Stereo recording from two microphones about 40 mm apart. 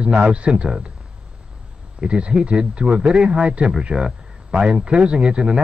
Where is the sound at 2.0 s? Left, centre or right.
Right.